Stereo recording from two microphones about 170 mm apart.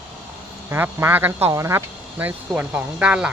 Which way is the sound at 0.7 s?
15° right (ahead or behind).